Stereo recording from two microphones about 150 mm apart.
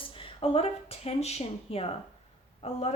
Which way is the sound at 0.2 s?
40° left (ahead or behind).